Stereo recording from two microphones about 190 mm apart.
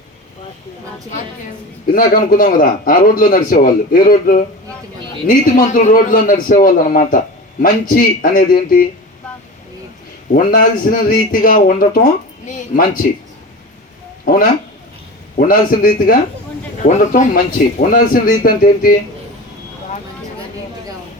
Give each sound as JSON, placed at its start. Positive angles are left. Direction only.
{"t": 1.9, "sound": "a man's voice", "side_deg": 45}
{"t": 10.3, "sound": "a man's voice", "side_deg": 45}
{"t": 15.4, "sound": "a man's voice", "side_deg": 45}